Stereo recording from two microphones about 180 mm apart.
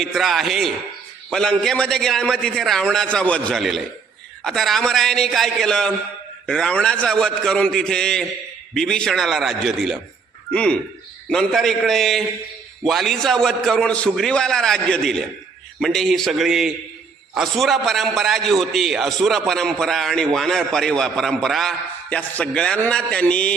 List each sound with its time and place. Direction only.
0.0 s a man's voice: centre (ahead or behind)